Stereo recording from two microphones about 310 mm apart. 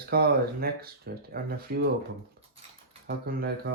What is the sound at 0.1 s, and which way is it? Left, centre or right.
Speech, right.